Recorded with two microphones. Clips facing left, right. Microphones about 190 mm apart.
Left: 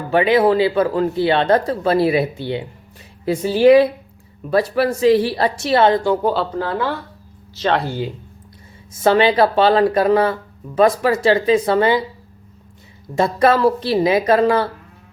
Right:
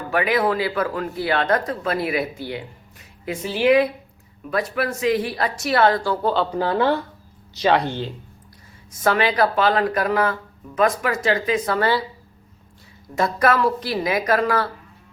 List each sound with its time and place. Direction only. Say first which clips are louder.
0.1 s speech: left 6 dB; 25° left (ahead or behind)
3.2 s a woman's voice: left 7 dB; 35° left (ahead or behind); by 6.3 s 20° left (ahead or behind)
6.5 s speech: right 1 dB; 15° right (ahead or behind)
7.7 s speech: even; 5° left (ahead or behind)
8.9 s speech: left 6 dB; 25° left (ahead or behind)
13.1 s speech: left 4 dB; 25° left (ahead or behind)